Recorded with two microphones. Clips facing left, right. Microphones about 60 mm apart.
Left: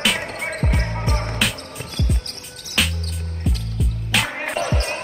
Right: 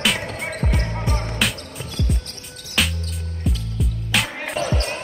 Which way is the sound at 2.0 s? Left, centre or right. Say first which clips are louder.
Even; left.